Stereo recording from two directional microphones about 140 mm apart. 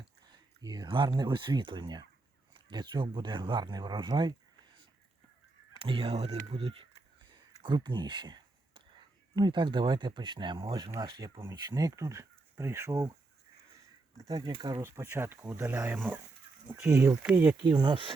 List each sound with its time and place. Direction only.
0.3 s speech: 30° right (ahead or behind)
5.8 s speech: 40° right (ahead or behind); by 13.1 s 25° right (ahead or behind)
14.2 s speech: 25° right (ahead or behind)
14.8 s speech: 15° right (ahead or behind)
17.1 s speech: 10° right (ahead or behind)
17.6 s speech: 30° right (ahead or behind)